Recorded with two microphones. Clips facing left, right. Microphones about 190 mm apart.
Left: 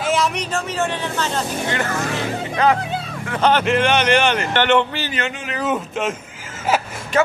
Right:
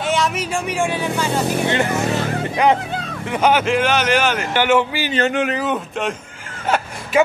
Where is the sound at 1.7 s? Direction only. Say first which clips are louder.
Right 4 dB; 20° right (ahead or behind).